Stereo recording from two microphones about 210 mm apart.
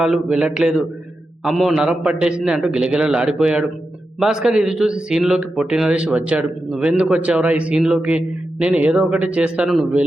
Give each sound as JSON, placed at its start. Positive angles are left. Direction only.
{"t": 0.0, "sound": "a man's voice", "side_deg": -5}